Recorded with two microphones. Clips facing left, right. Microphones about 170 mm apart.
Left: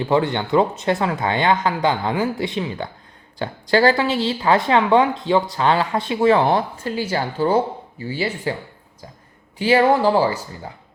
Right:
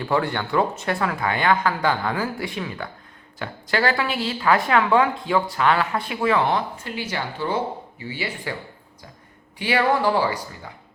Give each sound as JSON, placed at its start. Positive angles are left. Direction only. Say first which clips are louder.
{"t": 0.0, "sound": "a woman's voice", "louder": "left 4 dB", "side_deg": 20}
{"t": 9.6, "sound": "a woman's voice", "louder": "left 5 dB", "side_deg": 30}